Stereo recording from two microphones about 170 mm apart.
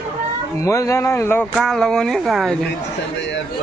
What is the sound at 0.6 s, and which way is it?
Speech, 20° left (ahead or behind).